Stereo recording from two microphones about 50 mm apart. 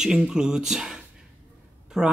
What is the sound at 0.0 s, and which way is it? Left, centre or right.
Speech, centre.